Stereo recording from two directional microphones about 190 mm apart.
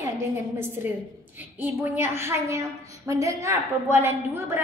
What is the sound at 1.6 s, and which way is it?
A woman's voice, 10° right (ahead or behind).